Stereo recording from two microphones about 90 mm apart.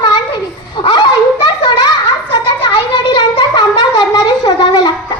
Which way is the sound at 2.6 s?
70° left (ahead or behind).